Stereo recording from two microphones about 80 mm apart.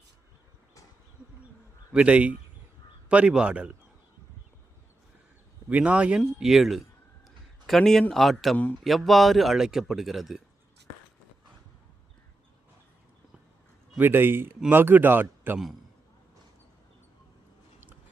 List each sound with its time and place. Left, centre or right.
1.9 s a man's voice: centre
5.6 s a man's voice: centre
7.3 s a sound: centre
8.1 s speech: centre
14.0 s speech: right